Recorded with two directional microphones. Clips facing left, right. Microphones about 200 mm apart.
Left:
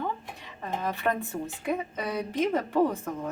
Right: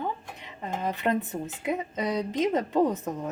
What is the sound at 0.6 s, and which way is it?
Speech, 20° right (ahead or behind).